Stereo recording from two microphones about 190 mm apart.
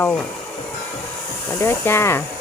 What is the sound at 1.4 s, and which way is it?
Speech, 15° left (ahead or behind).